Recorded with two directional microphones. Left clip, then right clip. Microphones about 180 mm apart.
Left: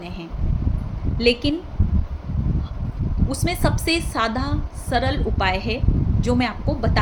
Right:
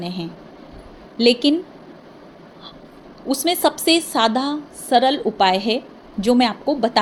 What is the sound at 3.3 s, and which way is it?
A woman's voice, 25° right (ahead or behind).